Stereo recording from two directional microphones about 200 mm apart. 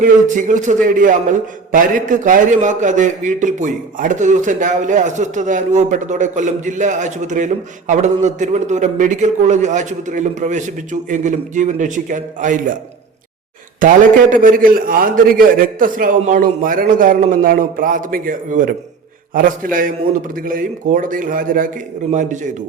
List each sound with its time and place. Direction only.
0.0 s a man's voice: 40° right (ahead or behind)
13.7 s a man's voice: 40° right (ahead or behind)